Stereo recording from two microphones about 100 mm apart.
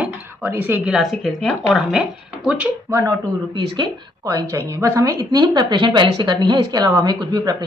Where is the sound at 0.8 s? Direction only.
5° right (ahead or behind).